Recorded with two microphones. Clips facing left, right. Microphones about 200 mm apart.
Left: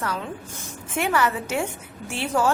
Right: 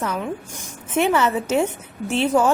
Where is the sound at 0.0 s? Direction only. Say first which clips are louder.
Right 4 dB; 20° right (ahead or behind).